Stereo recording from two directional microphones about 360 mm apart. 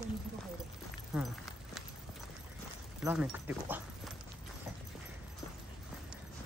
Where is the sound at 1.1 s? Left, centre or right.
Centre.